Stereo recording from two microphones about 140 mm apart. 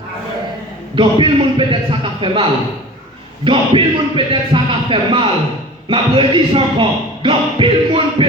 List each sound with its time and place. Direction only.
0.9 s speech: 35° right (ahead or behind)